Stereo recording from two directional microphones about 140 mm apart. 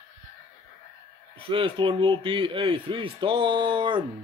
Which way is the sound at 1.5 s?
40° right (ahead or behind).